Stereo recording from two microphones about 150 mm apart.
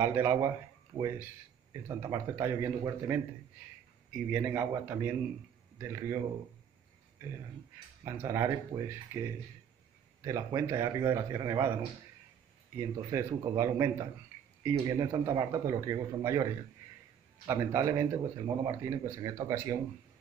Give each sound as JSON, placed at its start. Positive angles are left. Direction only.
{"t": 0.0, "sound": "a man's voice", "side_deg": -15}
{"t": 4.3, "sound": "a man's voice", "side_deg": -15}
{"t": 8.0, "sound": "speech", "side_deg": -20}
{"t": 10.2, "sound": "speech", "side_deg": -20}
{"t": 13.1, "sound": "speech", "side_deg": -20}
{"t": 17.5, "sound": "speech", "side_deg": -20}